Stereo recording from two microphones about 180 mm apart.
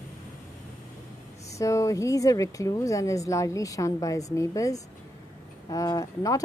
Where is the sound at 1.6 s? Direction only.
15° left (ahead or behind).